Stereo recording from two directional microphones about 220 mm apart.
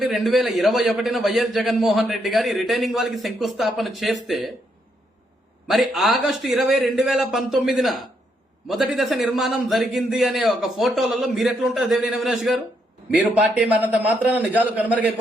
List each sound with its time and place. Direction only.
0.0 s a man's voice: centre (ahead or behind)
5.6 s a man's voice: centre (ahead or behind)